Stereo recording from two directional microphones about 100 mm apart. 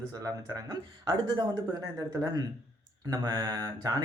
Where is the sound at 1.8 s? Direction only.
35° right (ahead or behind).